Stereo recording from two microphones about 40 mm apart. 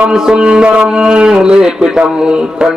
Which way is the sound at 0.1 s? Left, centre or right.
Centre.